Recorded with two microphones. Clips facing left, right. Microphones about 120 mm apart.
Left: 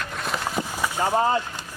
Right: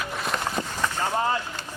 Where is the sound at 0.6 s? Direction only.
10° left (ahead or behind).